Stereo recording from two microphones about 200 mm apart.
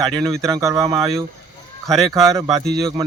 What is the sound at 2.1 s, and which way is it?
Speech, 15° right (ahead or behind).